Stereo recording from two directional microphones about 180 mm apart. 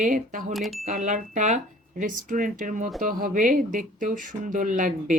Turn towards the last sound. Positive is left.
turn(degrees=-45)  # may be behind; listen again after turning